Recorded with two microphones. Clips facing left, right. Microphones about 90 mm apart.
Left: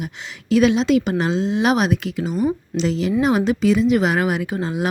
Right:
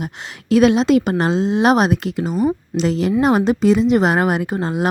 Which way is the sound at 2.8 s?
45° right (ahead or behind).